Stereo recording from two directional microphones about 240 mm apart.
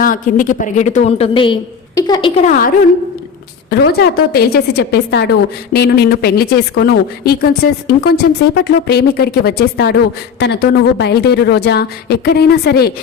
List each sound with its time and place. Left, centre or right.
0.0 s a woman's voice: left; by 2.3 s centre
2.4 s a woman's voice: left